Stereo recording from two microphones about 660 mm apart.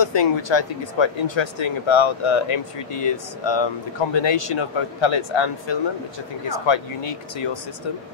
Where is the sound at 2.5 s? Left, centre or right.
Left.